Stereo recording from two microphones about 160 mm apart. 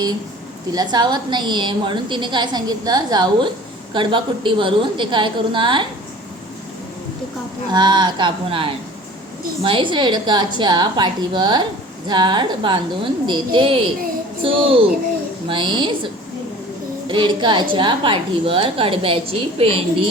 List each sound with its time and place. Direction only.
0.7 s a woman's voice: 25° right (ahead or behind)
7.7 s a woman's voice: 25° right (ahead or behind)
17.1 s a woman's voice: 30° right (ahead or behind)